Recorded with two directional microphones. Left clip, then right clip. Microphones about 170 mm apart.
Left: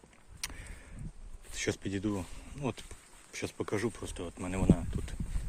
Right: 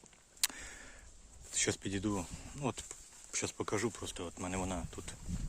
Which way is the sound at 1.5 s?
15° right (ahead or behind).